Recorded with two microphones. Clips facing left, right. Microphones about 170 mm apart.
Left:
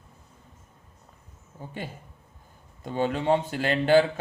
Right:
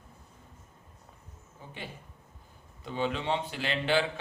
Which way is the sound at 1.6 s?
45° left (ahead or behind).